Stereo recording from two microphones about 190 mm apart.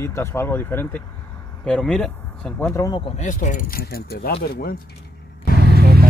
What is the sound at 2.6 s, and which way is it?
Speech, 15° left (ahead or behind).